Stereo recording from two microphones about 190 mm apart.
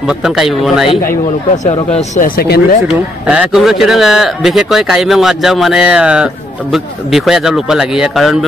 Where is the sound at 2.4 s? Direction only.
55° left (ahead or behind).